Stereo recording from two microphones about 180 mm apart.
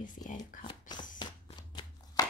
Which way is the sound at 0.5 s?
45° left (ahead or behind).